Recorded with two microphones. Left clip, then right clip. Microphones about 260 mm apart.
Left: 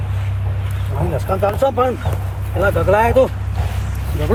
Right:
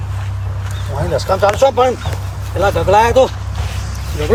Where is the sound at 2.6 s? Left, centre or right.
Centre.